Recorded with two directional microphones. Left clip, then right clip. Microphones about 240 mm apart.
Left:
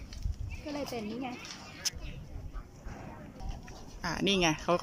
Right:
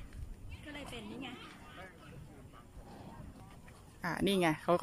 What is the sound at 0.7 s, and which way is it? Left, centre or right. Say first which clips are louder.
Speech: left 9 dB; centre.